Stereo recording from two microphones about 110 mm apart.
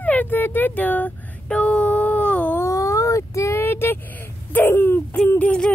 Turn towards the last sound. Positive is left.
turn(degrees=10)  # may be behind; listen again after turning